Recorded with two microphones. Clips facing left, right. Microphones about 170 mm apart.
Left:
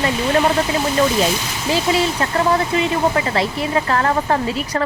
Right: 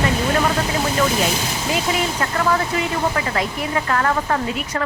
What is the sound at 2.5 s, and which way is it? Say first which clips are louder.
Speech: left 3 dB; 30° left (ahead or behind).